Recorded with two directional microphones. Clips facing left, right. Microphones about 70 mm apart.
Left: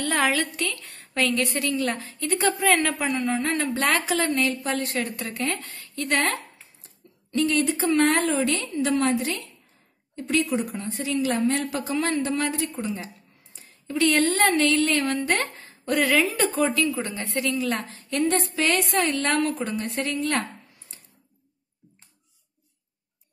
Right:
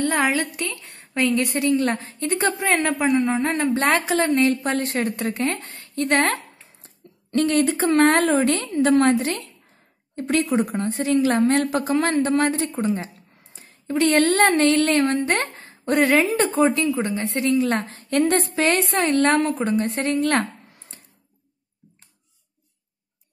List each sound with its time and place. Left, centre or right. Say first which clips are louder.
0.0 s a woman's voice: right 2 dB; right
13.6 s a sound: right 3 dB; right
14.1 s a woman's voice: right 6 dB; right
14.6 s a woman's voice: right 4 dB; right
17.7 s a woman's voice: right 5 dB; right
18.5 s a woman's voice: right 3 dB; right
20.2 s a woman's voice: right 6 dB; right